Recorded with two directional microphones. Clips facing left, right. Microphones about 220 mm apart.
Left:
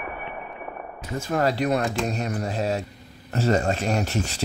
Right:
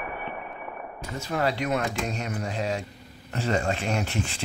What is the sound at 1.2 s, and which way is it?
Speech, 45° left (ahead or behind).